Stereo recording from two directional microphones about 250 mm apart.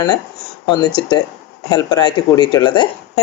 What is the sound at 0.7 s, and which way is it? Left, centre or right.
Speech, centre.